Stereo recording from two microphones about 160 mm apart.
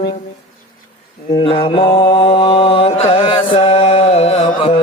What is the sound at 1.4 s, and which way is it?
Mantra, 35° left (ahead or behind).